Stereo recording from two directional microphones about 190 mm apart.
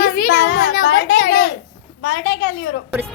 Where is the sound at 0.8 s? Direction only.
80° left.